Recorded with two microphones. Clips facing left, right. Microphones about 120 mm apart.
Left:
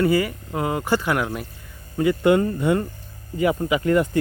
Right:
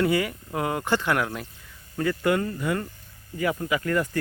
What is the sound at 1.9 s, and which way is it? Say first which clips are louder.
Speech: left 6 dB; 15° left (ahead or behind).